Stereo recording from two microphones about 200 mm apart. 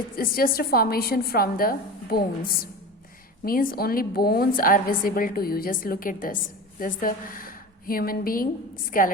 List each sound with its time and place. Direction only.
0.2 s a woman's voice: 45° left (ahead or behind)
3.4 s a woman's voice: 45° left (ahead or behind)